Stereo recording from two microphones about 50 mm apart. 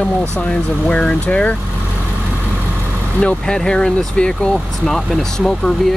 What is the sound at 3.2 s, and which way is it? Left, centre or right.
Speech, left.